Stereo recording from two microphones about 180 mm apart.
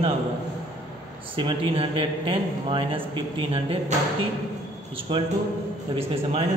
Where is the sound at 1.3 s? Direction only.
30° right (ahead or behind).